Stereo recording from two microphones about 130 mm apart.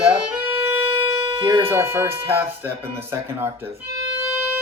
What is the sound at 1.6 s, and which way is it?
Speech, 20° right (ahead or behind).